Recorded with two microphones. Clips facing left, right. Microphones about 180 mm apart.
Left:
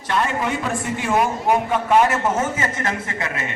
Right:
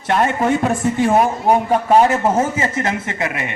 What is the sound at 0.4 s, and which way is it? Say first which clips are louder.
A woman's voice: right 7 dB; 45° right (ahead or behind).